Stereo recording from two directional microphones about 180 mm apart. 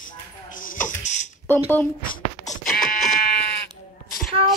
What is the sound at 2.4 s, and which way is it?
Fire alarm, 50° left (ahead or behind).